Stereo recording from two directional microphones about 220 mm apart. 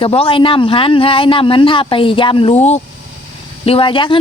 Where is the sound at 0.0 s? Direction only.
25° left (ahead or behind).